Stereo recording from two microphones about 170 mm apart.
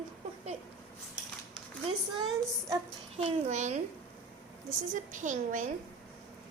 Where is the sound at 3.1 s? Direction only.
40° right (ahead or behind).